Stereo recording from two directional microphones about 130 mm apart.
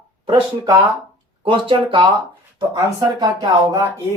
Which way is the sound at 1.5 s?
40° right (ahead or behind).